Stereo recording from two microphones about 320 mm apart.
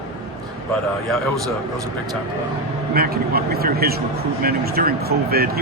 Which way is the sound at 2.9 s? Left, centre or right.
Right.